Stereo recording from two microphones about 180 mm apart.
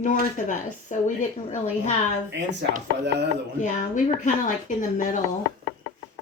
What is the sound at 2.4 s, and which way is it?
Speech, 75° right (ahead or behind).